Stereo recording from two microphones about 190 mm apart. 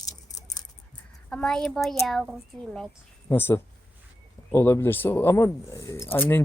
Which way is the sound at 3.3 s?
10° left (ahead or behind).